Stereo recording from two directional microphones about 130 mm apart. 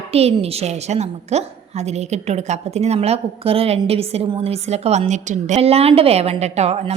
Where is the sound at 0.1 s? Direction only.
50° right (ahead or behind).